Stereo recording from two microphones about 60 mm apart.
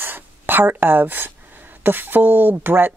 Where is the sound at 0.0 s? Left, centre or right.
Right.